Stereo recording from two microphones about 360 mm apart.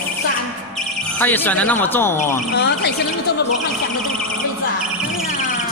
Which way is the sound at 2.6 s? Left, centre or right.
Left.